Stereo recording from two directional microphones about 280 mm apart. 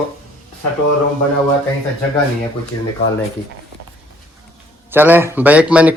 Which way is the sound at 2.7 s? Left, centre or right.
Left.